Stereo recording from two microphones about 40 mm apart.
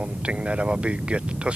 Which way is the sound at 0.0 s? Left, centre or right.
Right.